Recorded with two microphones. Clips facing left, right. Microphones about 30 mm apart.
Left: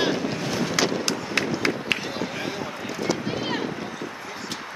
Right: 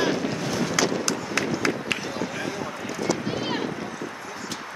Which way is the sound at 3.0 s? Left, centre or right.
Centre.